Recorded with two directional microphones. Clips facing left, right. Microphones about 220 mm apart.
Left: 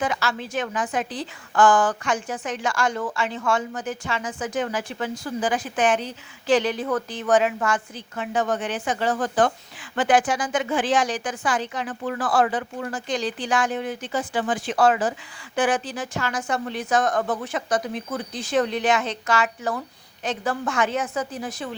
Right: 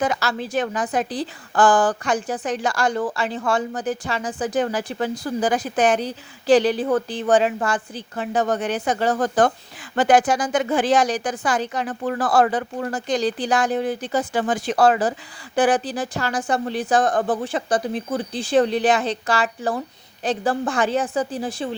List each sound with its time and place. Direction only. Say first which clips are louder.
0.0 s a woman's voice: right 3 dB; 40° right (ahead or behind)